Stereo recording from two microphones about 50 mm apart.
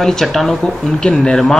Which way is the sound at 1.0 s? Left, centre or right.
Centre.